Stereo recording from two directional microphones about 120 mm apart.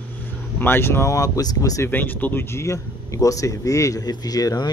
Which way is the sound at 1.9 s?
15° left (ahead or behind).